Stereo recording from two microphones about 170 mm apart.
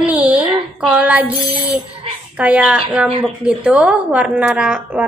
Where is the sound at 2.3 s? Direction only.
5° right (ahead or behind).